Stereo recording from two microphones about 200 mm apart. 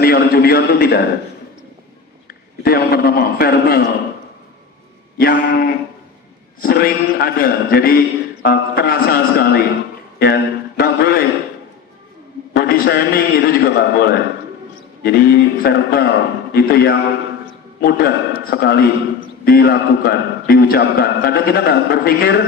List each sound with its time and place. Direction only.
0.0 s a man's voice: 50° left (ahead or behind)
2.2 s a man's voice: 50° left (ahead or behind)
5.1 s a man's voice: 45° left (ahead or behind)
12.5 s a man's voice: 50° left (ahead or behind)